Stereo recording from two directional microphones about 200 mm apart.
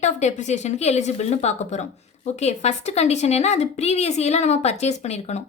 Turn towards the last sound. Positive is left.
turn(degrees=35)  # may be behind; listen again after turning